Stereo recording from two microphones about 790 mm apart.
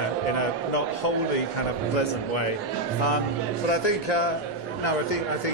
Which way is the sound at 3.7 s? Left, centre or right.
Left.